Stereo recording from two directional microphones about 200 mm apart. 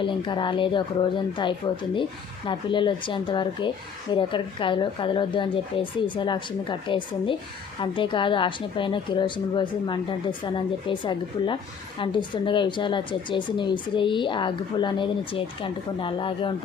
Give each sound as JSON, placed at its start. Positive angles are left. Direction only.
{"t": 0.0, "sound": "a woman's voice", "side_deg": 25}